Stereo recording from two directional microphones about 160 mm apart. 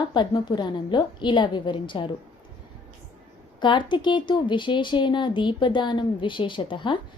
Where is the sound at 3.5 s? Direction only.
30° left (ahead or behind).